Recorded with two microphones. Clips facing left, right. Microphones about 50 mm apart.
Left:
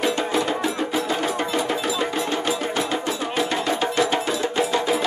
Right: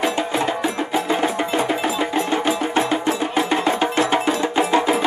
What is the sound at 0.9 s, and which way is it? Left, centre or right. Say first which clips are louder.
Percussion: right 3 dB; right.